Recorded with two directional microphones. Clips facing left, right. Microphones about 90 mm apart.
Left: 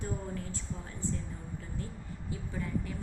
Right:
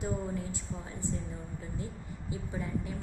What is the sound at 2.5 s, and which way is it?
Speech, 20° right (ahead or behind).